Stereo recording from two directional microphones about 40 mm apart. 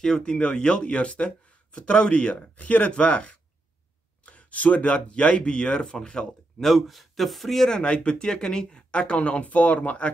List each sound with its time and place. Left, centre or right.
0.0 s speech: centre
6.6 s speech: centre
7.8 s speech: left